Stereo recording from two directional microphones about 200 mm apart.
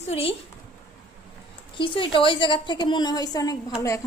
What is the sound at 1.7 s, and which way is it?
A woman's voice, 25° left (ahead or behind).